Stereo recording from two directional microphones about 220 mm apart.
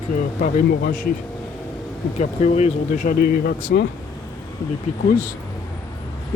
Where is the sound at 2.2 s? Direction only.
30° left (ahead or behind).